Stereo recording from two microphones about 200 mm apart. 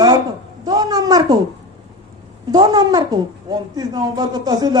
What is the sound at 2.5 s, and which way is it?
A woman's voice, 20° right (ahead or behind).